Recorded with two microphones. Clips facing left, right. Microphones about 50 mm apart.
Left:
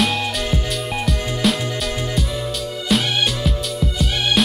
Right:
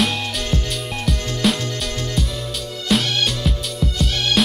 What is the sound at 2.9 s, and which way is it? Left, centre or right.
Music, centre.